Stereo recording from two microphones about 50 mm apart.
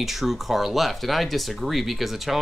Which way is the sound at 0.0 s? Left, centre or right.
Centre.